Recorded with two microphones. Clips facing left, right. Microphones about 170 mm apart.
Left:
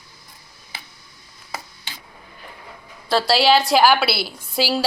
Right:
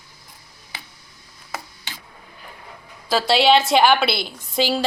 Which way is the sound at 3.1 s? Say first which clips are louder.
Even; centre (ahead or behind).